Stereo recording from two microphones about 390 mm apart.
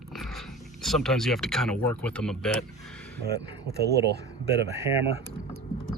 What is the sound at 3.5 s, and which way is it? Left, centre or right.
Speech, right.